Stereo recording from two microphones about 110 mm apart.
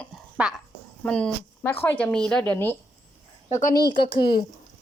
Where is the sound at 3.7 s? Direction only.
35° left (ahead or behind).